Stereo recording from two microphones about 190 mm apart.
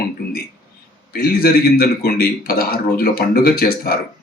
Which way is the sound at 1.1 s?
55° left (ahead or behind).